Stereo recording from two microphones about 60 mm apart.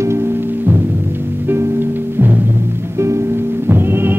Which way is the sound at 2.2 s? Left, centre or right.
Right.